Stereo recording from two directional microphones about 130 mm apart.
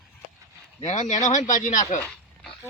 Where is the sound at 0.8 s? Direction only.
65° left (ahead or behind).